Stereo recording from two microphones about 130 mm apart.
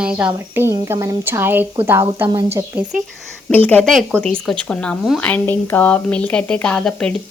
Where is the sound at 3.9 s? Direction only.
Centre (ahead or behind).